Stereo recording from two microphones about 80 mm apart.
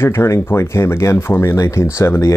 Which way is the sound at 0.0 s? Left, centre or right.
Left.